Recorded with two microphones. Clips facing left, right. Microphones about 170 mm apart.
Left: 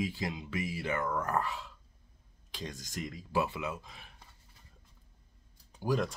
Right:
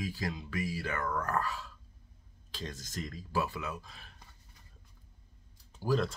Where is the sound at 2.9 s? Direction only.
15° left (ahead or behind).